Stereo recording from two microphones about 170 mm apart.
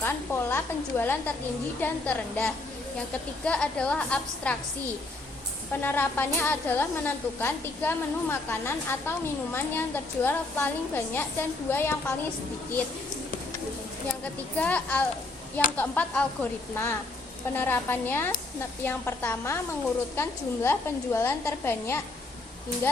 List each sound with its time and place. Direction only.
0.0 s a woman's voice: 10° left (ahead or behind)
5.8 s a woman's voice: 10° left (ahead or behind)
14.5 s a woman's voice: 10° left (ahead or behind)
20.7 s a woman's voice: 15° left (ahead or behind)